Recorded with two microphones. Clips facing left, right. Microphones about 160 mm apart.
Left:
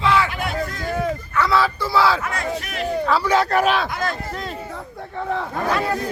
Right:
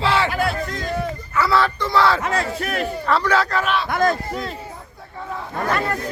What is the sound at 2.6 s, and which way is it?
Speech, 45° right (ahead or behind).